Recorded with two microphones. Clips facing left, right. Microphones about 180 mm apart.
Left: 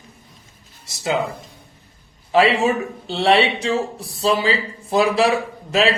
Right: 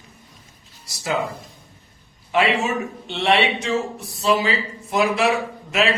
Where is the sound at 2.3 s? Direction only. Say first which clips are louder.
Left 4 dB; 35° left (ahead or behind).